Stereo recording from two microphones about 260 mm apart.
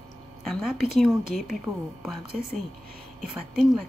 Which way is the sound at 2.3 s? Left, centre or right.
Right.